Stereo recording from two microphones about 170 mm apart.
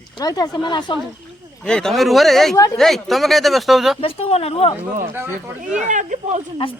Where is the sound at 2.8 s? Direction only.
Centre (ahead or behind).